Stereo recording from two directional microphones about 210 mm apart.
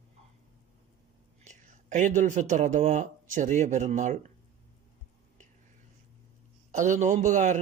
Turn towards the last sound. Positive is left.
turn(degrees=-35)  # may be behind; listen again after turning